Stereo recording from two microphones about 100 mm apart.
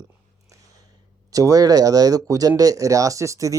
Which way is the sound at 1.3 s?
35° right (ahead or behind).